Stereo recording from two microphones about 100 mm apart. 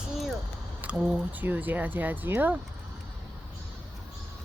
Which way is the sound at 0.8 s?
10° right (ahead or behind).